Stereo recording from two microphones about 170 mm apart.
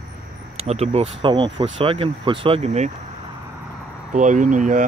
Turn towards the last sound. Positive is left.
turn(degrees=-50)  # may be behind; listen again after turning